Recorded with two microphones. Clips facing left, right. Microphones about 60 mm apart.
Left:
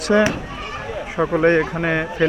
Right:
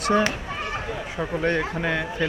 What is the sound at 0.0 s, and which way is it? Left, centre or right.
Speech, left.